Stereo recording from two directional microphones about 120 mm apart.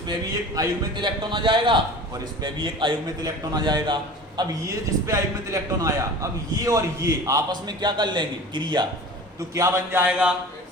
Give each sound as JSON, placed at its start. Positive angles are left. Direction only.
{"t": 0.1, "sound": "a man's voice", "side_deg": -30}
{"t": 9.6, "sound": "speech", "side_deg": -25}